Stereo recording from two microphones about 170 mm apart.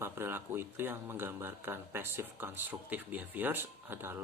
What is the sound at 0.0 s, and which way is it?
Speech, 15° right (ahead or behind).